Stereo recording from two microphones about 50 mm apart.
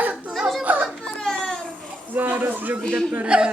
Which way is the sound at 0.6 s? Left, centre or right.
Right.